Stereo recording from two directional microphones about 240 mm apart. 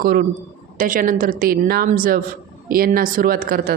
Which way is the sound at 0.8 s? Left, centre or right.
Right.